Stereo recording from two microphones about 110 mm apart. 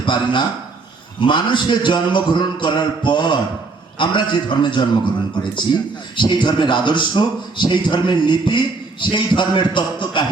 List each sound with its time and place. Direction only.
0.0 s a man's voice: 45° left (ahead or behind)